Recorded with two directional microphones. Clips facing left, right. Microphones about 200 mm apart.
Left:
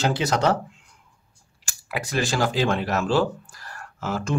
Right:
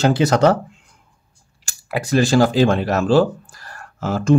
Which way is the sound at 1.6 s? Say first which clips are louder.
Right 6 dB; 30° right (ahead or behind).